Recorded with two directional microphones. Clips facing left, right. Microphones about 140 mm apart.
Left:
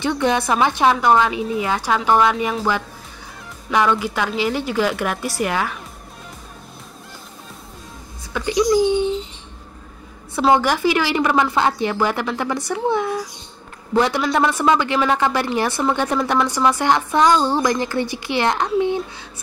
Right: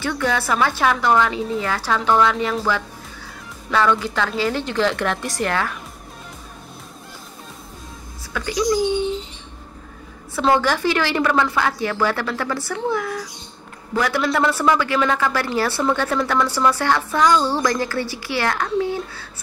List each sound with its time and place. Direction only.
0.0 s a woman's voice: 20° left (ahead or behind)
3.7 s a woman's voice: 15° left (ahead or behind)
8.3 s a sound: 20° left (ahead or behind)
10.5 s a woman's voice: 15° left (ahead or behind)